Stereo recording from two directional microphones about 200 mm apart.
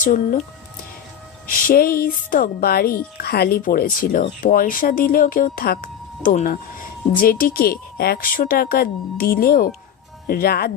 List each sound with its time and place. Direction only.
0.0 s speech: 40° left (ahead or behind)
1.5 s speech: 45° left (ahead or behind)